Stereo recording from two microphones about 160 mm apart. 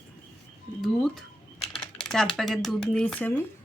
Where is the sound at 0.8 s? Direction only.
Centre (ahead or behind).